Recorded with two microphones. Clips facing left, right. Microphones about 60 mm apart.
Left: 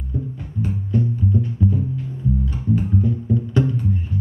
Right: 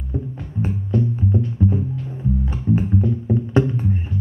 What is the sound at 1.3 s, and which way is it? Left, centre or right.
Music, right.